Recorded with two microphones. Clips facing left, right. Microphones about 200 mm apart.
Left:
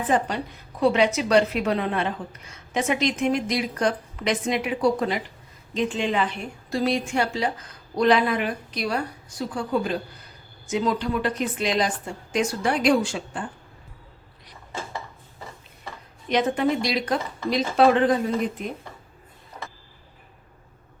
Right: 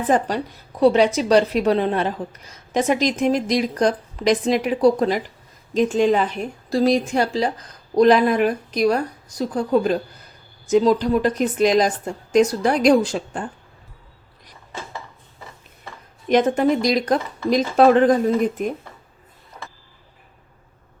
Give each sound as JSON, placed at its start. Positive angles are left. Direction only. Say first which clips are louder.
{"t": 0.1, "sound": "a woman's voice", "louder": "right 4 dB", "side_deg": -40}
{"t": 16.3, "sound": "speech", "louder": "right 5 dB", "side_deg": -45}